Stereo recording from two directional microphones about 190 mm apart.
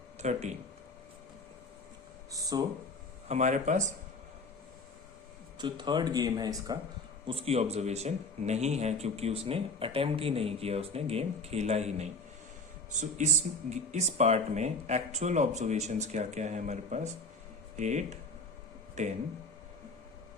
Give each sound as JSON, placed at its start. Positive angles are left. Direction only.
{"t": 0.2, "sound": "speech", "side_deg": -35}
{"t": 2.3, "sound": "speech", "side_deg": -20}
{"t": 3.2, "sound": "speech", "side_deg": -40}
{"t": 5.5, "sound": "speech", "side_deg": -25}
{"t": 7.3, "sound": "speech", "side_deg": -30}